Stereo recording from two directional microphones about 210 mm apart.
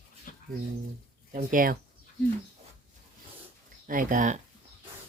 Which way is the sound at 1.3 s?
40° right (ahead or behind).